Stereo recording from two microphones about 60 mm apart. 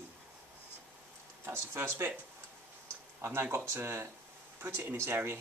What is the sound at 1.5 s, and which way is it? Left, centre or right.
Speech, right.